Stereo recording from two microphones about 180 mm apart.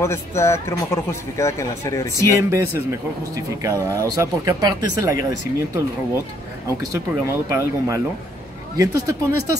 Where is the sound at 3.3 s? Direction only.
15° right (ahead or behind).